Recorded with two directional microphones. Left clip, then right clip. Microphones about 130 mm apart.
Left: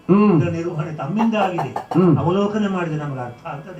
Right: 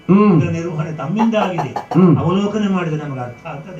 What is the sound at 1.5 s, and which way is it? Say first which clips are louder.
Speech: right 2 dB; 5° right (ahead or behind).